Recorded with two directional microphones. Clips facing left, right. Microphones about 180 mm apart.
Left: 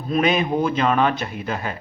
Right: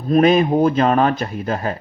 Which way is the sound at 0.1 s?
45° right (ahead or behind).